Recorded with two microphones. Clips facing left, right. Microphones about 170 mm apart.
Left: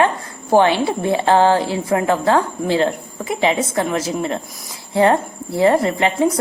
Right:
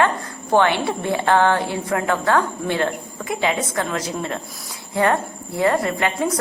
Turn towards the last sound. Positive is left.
turn(degrees=25)  # may be behind; listen again after turning